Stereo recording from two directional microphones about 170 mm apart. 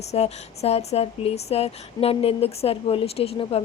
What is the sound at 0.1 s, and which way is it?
Speech, 40° left (ahead or behind).